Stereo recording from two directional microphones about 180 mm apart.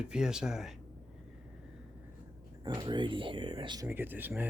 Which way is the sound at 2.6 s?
25° right (ahead or behind).